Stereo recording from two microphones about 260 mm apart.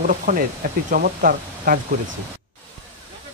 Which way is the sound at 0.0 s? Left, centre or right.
Right.